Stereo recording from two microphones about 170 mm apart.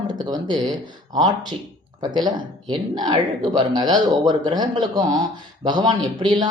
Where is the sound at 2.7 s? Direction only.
25° right (ahead or behind).